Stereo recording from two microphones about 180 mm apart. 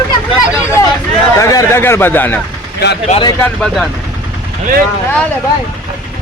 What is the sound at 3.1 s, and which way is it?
Speech, 25° left (ahead or behind).